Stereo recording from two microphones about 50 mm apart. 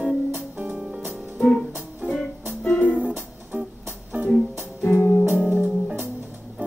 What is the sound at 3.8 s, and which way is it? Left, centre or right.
Music, right.